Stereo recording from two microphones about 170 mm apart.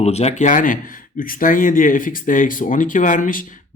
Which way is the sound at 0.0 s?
40° left (ahead or behind).